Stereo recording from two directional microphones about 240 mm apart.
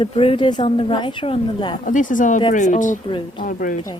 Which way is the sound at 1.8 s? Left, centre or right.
Left.